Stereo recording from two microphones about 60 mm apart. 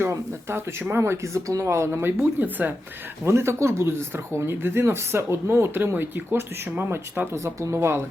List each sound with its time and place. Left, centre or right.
0.4 s speech: right
2.4 s speech: right
3.2 s speech: right
7.3 s speech: right